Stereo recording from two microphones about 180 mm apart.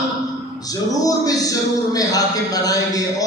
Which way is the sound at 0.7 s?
20° left (ahead or behind).